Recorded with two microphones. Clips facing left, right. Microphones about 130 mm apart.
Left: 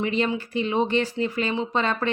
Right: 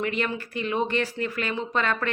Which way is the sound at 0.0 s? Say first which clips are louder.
Left 3 dB; 25° left (ahead or behind).